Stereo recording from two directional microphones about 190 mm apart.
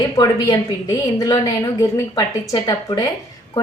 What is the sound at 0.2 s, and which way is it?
A woman's voice, 20° left (ahead or behind).